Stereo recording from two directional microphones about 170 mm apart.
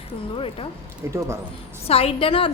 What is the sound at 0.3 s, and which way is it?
Speech, 30° left (ahead or behind).